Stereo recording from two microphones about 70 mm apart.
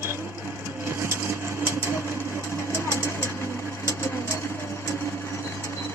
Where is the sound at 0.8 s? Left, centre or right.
Right.